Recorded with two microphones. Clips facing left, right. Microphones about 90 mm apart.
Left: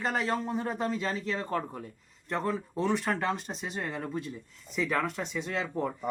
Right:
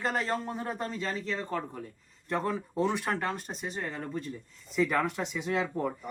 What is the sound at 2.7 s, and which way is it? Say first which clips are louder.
Speech: even; 15° right (ahead or behind).